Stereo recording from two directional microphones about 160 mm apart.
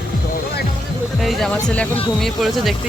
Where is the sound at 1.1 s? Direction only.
Centre (ahead or behind).